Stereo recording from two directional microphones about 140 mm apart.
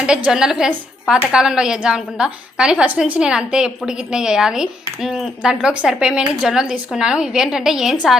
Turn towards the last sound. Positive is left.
turn(degrees=-5)  # may be behind; listen again after turning